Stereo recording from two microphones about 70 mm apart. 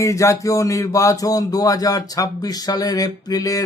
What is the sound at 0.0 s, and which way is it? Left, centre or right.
Speech, left.